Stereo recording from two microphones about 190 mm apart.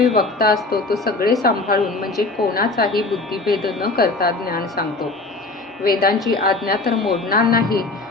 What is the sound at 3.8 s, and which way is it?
Speech, 55° left (ahead or behind).